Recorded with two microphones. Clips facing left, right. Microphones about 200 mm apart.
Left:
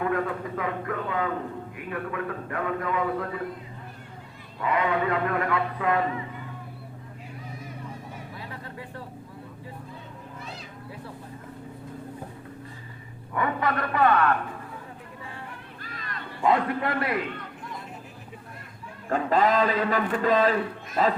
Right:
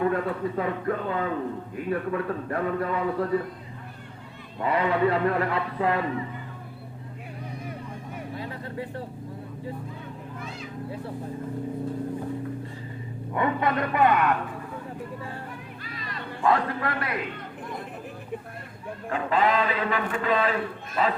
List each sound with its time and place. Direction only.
0.1 s a man's voice: 30° right (ahead or behind)
4.6 s a man's voice: 35° right (ahead or behind)
13.3 s a man's voice: 25° right (ahead or behind)
15.8 s a sound: 50° left (ahead or behind)
16.4 s a man's voice: 20° left (ahead or behind)
19.1 s a man's voice: 40° left (ahead or behind)